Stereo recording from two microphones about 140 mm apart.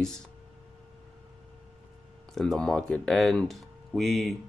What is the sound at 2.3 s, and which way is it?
Speech, 5° left (ahead or behind).